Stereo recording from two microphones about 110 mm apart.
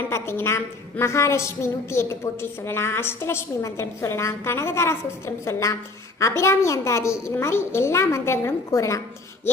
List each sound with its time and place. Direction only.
0.1 s a woman's voice: 20° left (ahead or behind)